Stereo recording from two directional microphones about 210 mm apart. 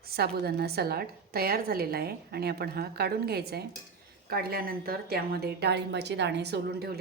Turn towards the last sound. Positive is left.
turn(degrees=-50)  # may be behind; listen again after turning